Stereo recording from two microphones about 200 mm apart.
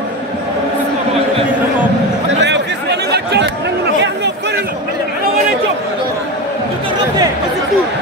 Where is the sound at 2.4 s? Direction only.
60° right (ahead or behind).